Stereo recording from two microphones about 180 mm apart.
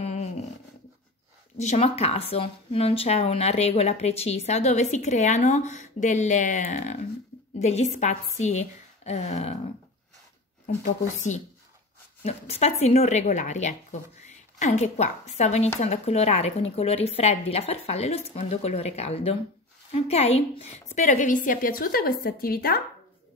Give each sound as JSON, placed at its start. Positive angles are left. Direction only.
{"t": 0.0, "sound": "dog", "side_deg": 35}
{"t": 1.6, "sound": "speech", "side_deg": 35}
{"t": 10.8, "sound": "a woman's voice", "side_deg": 40}